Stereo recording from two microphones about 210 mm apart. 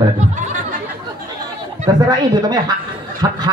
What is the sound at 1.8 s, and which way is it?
Speech, 20° right (ahead or behind).